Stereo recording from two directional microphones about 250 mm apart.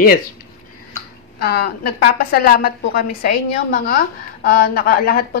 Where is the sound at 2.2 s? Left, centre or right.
Left.